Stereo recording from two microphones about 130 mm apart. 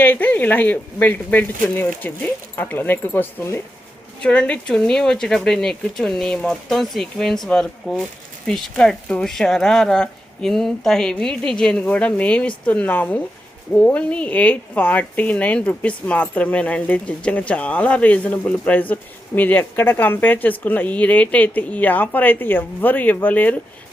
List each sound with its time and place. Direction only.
0.0 s a woman's voice: 15° left (ahead or behind)